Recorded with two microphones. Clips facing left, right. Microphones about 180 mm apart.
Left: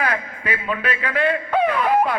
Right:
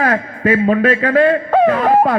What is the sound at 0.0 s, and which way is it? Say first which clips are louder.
A man's voice: right 9 dB; 45° right (ahead or behind).